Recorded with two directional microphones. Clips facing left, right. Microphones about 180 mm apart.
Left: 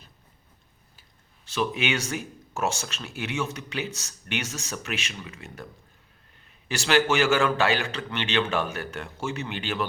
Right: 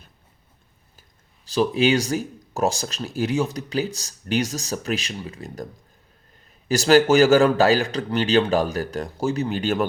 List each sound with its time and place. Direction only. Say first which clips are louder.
1.5 s speech: right 8 dB; 35° right (ahead or behind)
6.7 s speech: right 7 dB; 40° right (ahead or behind)